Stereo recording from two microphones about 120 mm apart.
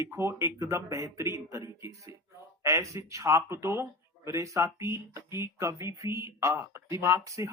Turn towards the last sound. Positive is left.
turn(degrees=-25)  # may be behind; listen again after turning